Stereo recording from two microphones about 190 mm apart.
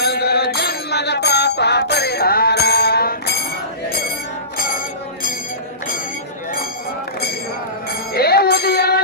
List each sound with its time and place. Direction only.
0.0 s music: 55° left (ahead or behind)
8.1 s music: 55° left (ahead or behind)